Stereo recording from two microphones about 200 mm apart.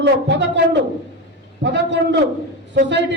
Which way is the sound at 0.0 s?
60° right (ahead or behind).